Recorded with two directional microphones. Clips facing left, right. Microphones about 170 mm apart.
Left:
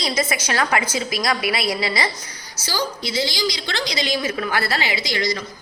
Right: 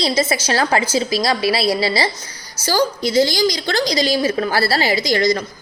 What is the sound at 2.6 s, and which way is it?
A woman's voice, 45° right (ahead or behind).